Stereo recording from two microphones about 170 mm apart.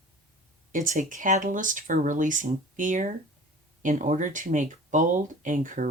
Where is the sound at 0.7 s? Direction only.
50° right (ahead or behind).